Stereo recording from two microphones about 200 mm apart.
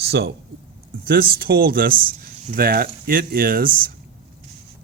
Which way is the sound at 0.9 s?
50° right (ahead or behind).